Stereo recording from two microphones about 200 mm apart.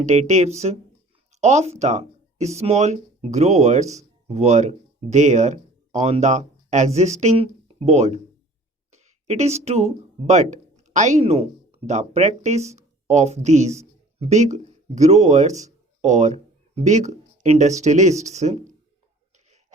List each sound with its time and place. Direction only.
0.0 s speech: 35° right (ahead or behind)